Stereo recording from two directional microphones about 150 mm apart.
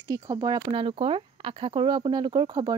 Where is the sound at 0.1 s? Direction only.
25° right (ahead or behind).